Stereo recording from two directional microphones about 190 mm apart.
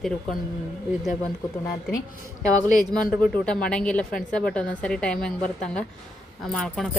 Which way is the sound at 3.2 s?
5° left (ahead or behind).